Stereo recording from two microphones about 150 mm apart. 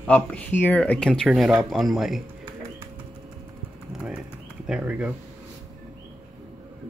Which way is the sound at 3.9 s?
5° right (ahead or behind).